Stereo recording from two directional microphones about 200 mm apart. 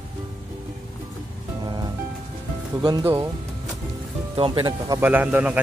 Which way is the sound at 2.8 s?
20° right (ahead or behind).